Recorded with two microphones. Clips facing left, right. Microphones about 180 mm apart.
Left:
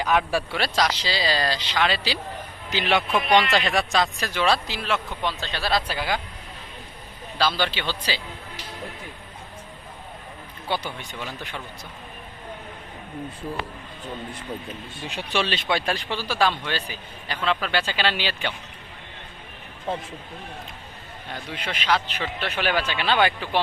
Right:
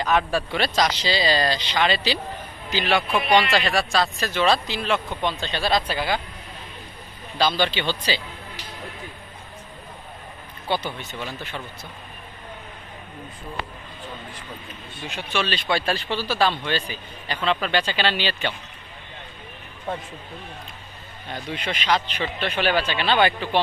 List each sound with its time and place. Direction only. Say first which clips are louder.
0.0 s a man's voice: right 1 dB; 10° left (ahead or behind)
2.6 s a man's voice: right 1 dB; 20° left (ahead or behind)
3.1 s speech: even; 5° right (ahead or behind)
3.7 s a man's voice: even; 20° left (ahead or behind)
7.3 s a man's voice: right 2 dB; 5° left (ahead or behind)
10.7 s a man's voice: right 2 dB; 10° left (ahead or behind)
15.1 s speech: left 1 dB; 35° left (ahead or behind)
15.7 s a man's voice: right 3 dB; 15° left (ahead or behind)
21.5 s a man's voice: right 1 dB; 5° left (ahead or behind)